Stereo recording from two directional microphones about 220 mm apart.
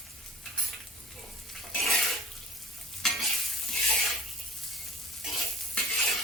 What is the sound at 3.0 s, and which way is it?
Stir, centre (ahead or behind).